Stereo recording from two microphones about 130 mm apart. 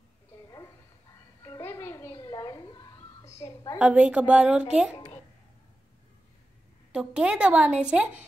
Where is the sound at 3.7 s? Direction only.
10° right (ahead or behind).